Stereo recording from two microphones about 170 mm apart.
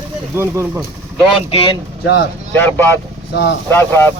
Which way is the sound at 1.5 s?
30° left (ahead or behind).